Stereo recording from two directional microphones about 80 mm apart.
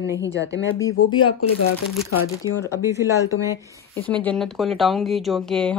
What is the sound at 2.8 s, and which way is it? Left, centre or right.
Speech, right.